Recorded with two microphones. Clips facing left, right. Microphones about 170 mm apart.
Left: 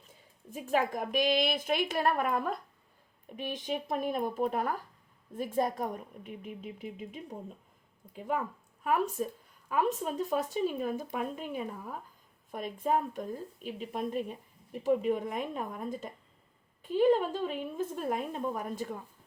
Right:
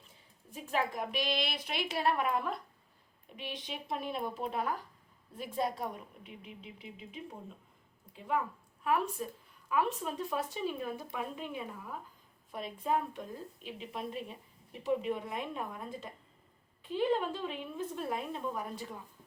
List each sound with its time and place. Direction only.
0.6 s a woman's voice: 45° left (ahead or behind)
8.8 s a woman's voice: 45° left (ahead or behind)